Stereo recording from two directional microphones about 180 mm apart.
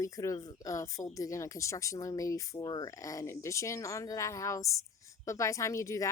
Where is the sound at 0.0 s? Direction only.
20° left (ahead or behind).